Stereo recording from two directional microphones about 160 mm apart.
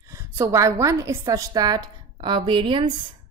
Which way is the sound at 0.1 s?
15° right (ahead or behind).